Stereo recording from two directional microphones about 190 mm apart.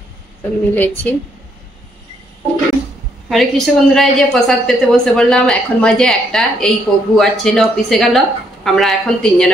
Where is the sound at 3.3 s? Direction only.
Centre (ahead or behind).